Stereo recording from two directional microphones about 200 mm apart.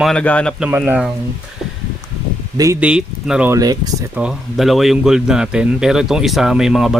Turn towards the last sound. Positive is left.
turn(degrees=0)  # may be behind; listen again after turning